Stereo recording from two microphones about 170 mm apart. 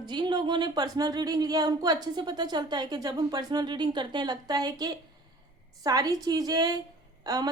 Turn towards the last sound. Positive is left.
turn(degrees=-20)  # may be behind; listen again after turning